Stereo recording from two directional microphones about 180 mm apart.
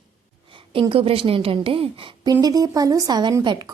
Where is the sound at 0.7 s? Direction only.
30° right (ahead or behind).